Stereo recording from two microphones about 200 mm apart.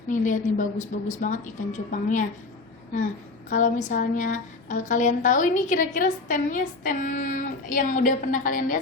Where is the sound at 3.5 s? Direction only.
40° left (ahead or behind).